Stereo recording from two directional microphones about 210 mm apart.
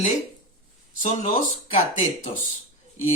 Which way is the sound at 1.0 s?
40° left (ahead or behind).